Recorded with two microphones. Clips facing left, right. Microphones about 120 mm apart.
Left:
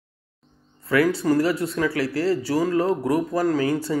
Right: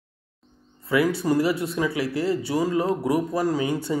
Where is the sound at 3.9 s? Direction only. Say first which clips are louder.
Left 1 dB; 15° right (ahead or behind).